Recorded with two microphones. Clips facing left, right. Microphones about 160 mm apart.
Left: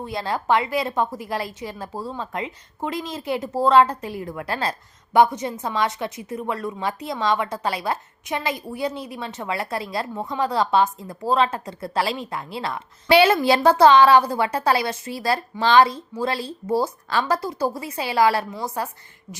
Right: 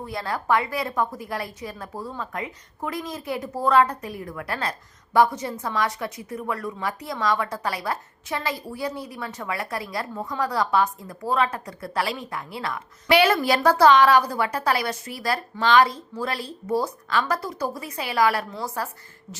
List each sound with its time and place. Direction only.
0.0 s a woman's voice: 25° left (ahead or behind)